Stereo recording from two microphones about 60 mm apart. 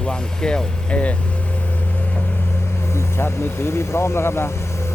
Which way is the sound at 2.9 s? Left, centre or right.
Left.